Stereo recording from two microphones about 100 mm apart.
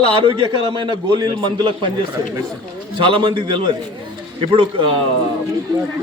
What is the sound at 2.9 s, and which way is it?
Speech, 55° right (ahead or behind).